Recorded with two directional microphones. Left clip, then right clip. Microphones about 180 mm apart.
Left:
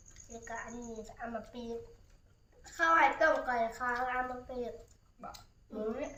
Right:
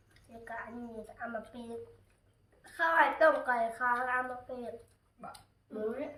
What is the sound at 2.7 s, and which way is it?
A woman's voice, 10° right (ahead or behind).